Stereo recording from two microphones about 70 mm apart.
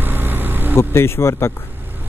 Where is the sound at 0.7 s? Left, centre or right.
Left.